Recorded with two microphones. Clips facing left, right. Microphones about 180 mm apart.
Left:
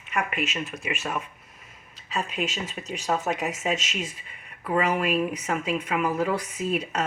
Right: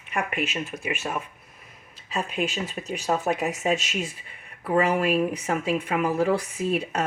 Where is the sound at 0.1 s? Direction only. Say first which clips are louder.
Even; 35° right (ahead or behind).